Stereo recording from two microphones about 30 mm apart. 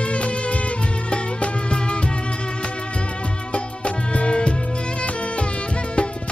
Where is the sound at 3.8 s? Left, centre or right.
Left.